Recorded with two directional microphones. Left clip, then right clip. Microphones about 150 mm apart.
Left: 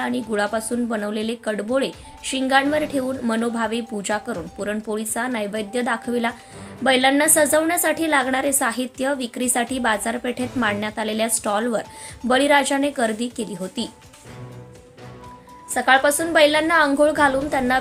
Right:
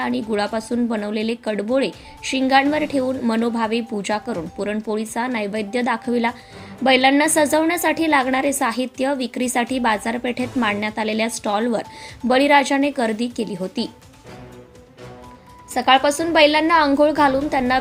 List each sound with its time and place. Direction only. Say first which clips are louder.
0.0 s a woman's voice: right 1 dB; 15° right (ahead or behind)
15.7 s a woman's voice: right 1 dB; 20° right (ahead or behind)